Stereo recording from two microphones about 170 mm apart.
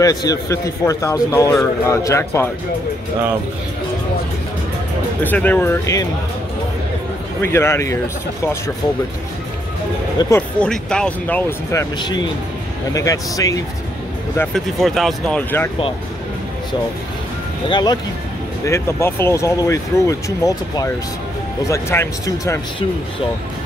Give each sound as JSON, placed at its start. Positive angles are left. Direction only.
{"t": 0.0, "sound": "a man's voice", "side_deg": 20}
{"t": 5.2, "sound": "speech", "side_deg": 10}
{"t": 7.4, "sound": "speech", "side_deg": 15}
{"t": 10.3, "sound": "speech", "side_deg": 5}
{"t": 12.9, "sound": "a man's voice", "side_deg": 20}
{"t": 14.5, "sound": "speech", "side_deg": 0}
{"t": 17.6, "sound": "a man's voice", "side_deg": 25}
{"t": 18.7, "sound": "speech", "side_deg": 15}